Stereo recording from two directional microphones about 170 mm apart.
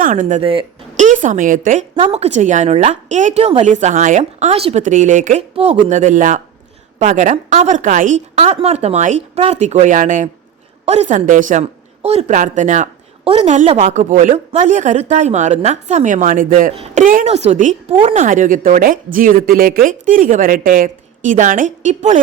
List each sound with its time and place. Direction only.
0.0 s a woman's voice: 50° right (ahead or behind)
2.0 s a woman's voice: 35° right (ahead or behind); by 16.7 s 55° right (ahead or behind)
16.7 s a woman's voice: 40° right (ahead or behind)